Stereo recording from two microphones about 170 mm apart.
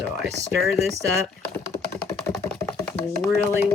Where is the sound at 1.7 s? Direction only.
20° left (ahead or behind).